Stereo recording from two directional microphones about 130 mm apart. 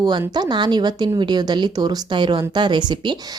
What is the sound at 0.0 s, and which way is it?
Speech, 30° right (ahead or behind).